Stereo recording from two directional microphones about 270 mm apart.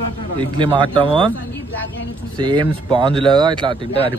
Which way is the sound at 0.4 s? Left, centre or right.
Centre.